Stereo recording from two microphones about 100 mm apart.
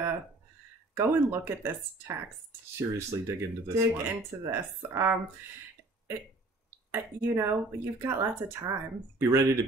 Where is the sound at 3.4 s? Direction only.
30° right (ahead or behind).